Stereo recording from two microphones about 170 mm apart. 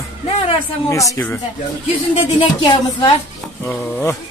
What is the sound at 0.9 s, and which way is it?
Speech, 20° left (ahead or behind).